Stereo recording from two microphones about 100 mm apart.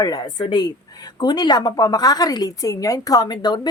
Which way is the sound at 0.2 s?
45° left (ahead or behind).